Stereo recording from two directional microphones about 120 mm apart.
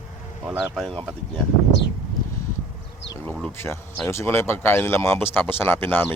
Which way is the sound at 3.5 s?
20° left (ahead or behind).